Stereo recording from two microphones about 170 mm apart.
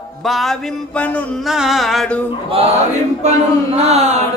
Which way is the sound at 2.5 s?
40° right (ahead or behind).